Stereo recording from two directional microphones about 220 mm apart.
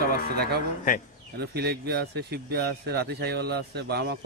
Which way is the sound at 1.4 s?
45° right (ahead or behind).